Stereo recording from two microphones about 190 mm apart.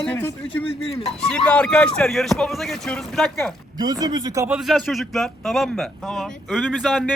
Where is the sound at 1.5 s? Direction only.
5° left (ahead or behind).